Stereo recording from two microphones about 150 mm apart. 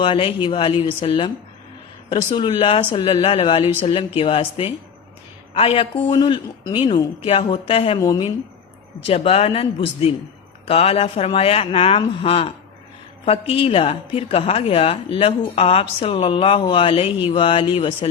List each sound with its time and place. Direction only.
0.0 s a woman's voice: 35° left (ahead or behind)
7.9 s a woman's voice: 25° left (ahead or behind)
9.0 s a woman's voice: 40° left (ahead or behind)